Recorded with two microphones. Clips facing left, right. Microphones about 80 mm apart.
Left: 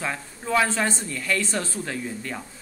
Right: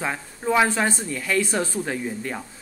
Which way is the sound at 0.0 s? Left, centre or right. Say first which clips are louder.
Right 4 dB; centre.